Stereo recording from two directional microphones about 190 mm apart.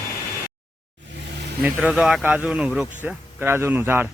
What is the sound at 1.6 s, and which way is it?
A man's voice, 5° right (ahead or behind).